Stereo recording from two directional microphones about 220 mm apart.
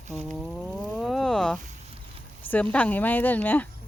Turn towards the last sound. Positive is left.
turn(degrees=5)  # may be behind; listen again after turning